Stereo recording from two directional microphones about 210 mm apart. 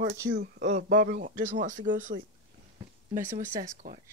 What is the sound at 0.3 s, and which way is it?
Speech, 55° right (ahead or behind).